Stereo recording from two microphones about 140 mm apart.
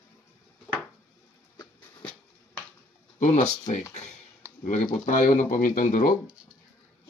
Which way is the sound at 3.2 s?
55° left (ahead or behind).